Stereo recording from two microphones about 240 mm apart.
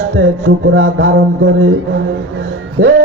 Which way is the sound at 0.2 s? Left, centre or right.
Right.